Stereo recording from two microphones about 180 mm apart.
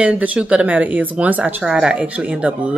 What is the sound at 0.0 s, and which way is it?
Speech, 5° right (ahead or behind).